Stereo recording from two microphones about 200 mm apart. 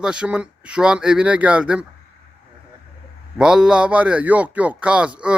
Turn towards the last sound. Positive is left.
turn(degrees=-5)  # may be behind; listen again after turning